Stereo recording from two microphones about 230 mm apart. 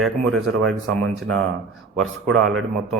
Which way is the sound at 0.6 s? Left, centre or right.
Centre.